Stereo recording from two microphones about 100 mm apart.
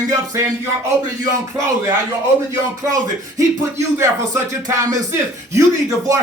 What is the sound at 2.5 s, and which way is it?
Speech, 35° right (ahead or behind).